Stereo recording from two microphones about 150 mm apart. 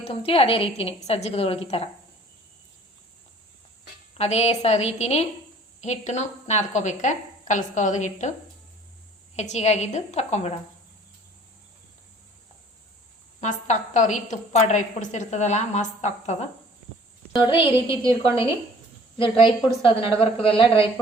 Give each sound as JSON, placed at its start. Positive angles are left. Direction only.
{"t": 0.0, "sound": "a woman's voice", "side_deg": 40}
{"t": 4.2, "sound": "a woman's voice", "side_deg": 45}
{"t": 9.3, "sound": "a woman's voice", "side_deg": 50}
{"t": 13.4, "sound": "a woman's voice", "side_deg": 55}
{"t": 17.3, "sound": "a woman's voice", "side_deg": 30}
{"t": 19.2, "sound": "a woman's voice", "side_deg": 35}